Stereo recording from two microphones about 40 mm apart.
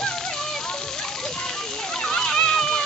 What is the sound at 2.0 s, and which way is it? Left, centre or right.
Splash, centre.